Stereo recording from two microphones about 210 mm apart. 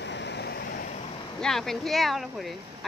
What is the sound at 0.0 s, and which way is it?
Vehicle, 55° left (ahead or behind).